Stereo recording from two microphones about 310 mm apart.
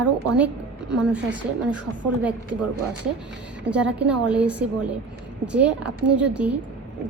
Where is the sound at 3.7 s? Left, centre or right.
Centre.